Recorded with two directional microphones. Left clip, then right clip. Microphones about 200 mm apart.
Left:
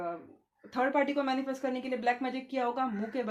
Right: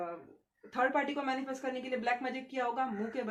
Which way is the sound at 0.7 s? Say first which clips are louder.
Left 2 dB; 35° left (ahead or behind).